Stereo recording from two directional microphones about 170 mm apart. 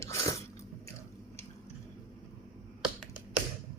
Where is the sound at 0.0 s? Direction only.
20° left (ahead or behind).